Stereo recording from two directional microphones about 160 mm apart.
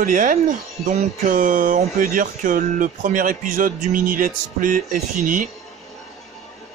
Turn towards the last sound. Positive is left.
turn(degrees=-55)  # may be behind; listen again after turning